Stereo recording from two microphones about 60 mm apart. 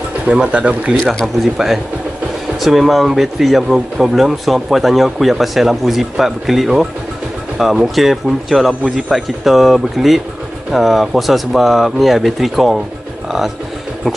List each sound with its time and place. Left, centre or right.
0.3 s speech: centre
1.2 s speech: centre